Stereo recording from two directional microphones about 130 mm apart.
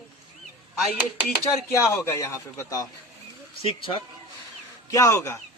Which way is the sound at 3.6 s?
45° left (ahead or behind).